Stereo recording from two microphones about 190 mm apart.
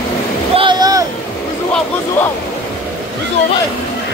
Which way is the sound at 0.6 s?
20° right (ahead or behind).